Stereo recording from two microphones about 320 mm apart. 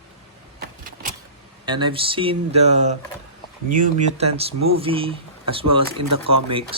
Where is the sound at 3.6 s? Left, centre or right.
Right.